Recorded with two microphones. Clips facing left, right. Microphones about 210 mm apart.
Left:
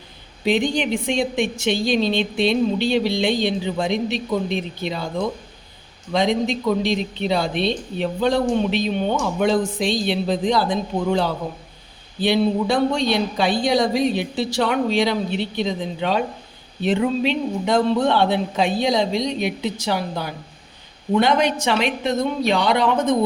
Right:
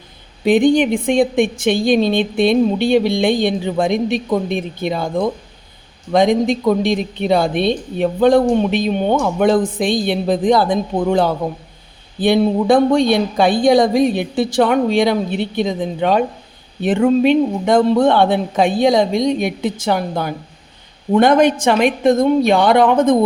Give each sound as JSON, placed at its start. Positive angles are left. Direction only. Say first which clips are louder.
{"t": 0.4, "sound": "a woman's voice", "louder": "right 8 dB", "side_deg": -55}
{"t": 6.1, "sound": "a woman's voice", "louder": "right 6 dB", "side_deg": -50}